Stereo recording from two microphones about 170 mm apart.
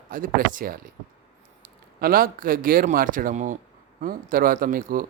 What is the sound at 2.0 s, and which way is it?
Speech, 60° right (ahead or behind).